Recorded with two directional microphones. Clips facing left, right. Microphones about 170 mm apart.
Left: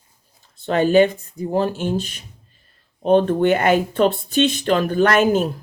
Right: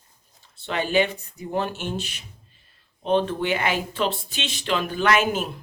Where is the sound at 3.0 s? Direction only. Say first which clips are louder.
Left 7 dB; 50° left (ahead or behind).